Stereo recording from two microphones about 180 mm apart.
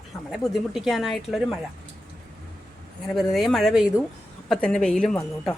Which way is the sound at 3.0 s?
Centre (ahead or behind).